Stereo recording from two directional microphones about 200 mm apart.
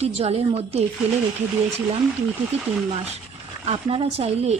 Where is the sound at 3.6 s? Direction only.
25° right (ahead or behind).